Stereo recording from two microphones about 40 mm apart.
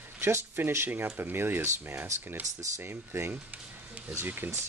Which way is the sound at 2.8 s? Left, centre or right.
Right.